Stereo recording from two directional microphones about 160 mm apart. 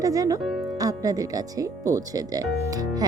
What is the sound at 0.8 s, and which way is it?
A woman's voice, 20° right (ahead or behind).